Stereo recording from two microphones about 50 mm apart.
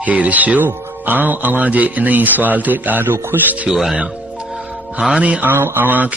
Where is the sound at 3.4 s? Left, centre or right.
Right.